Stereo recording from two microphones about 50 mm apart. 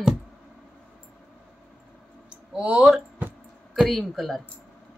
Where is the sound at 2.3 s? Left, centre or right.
Right.